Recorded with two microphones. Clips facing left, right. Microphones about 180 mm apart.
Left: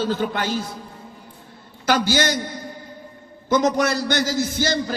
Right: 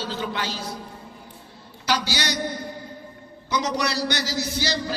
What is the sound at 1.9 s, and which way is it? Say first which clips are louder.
Speech: left 6 dB; 50° left (ahead or behind).